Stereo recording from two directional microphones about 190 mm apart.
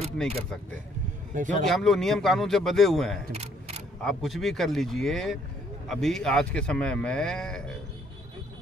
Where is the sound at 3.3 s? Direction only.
35° right (ahead or behind).